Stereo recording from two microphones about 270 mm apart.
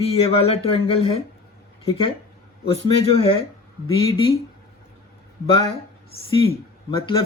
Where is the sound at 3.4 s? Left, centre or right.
Centre.